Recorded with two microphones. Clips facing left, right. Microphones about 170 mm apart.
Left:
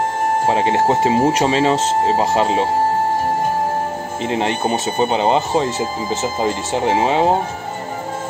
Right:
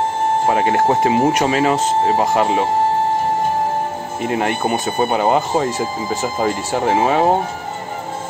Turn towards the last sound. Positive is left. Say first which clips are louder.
# right 1 dB
turn(degrees=20)  # may be behind; listen again after turning